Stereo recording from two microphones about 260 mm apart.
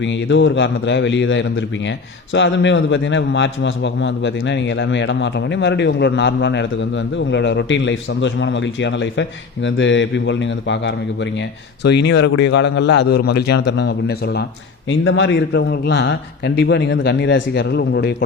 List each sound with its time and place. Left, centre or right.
0.0 s a man's voice: left